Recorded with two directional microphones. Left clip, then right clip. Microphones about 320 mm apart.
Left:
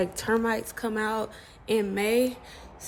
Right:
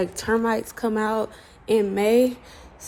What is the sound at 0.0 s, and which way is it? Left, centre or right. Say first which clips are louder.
Speech: right 3 dB; centre.